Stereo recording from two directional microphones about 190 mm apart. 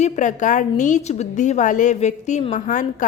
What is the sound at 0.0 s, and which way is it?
A woman's voice, 40° left (ahead or behind).